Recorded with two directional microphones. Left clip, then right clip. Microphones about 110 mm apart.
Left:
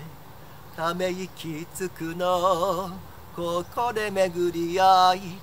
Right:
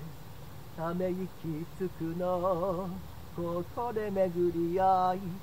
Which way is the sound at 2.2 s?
30° left (ahead or behind).